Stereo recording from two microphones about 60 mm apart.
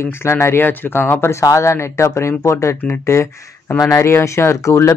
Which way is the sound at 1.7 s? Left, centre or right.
Left.